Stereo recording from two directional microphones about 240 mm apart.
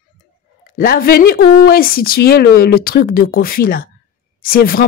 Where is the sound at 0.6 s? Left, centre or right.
Left.